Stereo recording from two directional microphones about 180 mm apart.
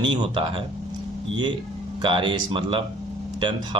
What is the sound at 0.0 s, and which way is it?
Speech, 30° right (ahead or behind).